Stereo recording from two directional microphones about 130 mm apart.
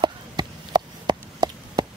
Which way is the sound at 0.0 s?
35° right (ahead or behind).